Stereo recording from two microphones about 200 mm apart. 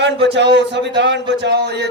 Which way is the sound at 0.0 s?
60° right (ahead or behind).